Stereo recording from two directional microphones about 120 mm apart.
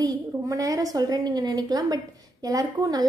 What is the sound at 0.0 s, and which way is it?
Speech, 30° right (ahead or behind).